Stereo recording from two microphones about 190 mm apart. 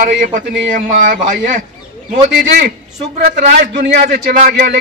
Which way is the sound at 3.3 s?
55° right (ahead or behind).